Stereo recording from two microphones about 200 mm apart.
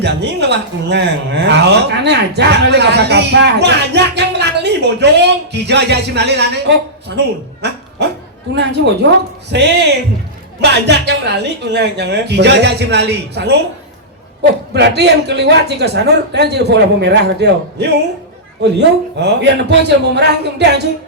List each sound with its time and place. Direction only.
0.0 s speech: 55° right (ahead or behind)
14.7 s speech: 55° right (ahead or behind)